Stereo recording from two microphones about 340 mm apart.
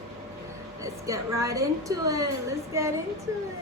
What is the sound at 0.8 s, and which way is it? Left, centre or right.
A woman's voice, centre.